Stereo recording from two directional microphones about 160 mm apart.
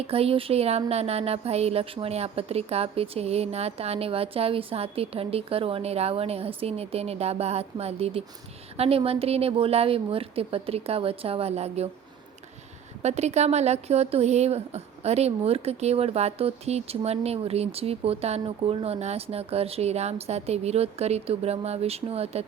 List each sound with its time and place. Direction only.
0.1 s speech: 35° right (ahead or behind)
13.0 s speech: 45° right (ahead or behind)